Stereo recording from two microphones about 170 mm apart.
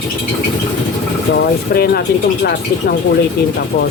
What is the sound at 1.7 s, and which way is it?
Speech, 65° left (ahead or behind).